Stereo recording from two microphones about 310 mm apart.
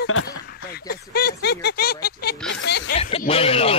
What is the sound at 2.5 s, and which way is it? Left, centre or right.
Music, left.